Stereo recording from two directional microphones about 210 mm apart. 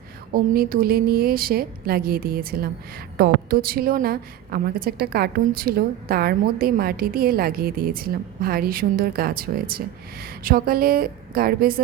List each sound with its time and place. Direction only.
0.3 s a woman's voice: 45° right (ahead or behind)